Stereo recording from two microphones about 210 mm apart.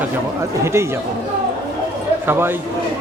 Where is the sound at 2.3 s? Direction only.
10° right (ahead or behind).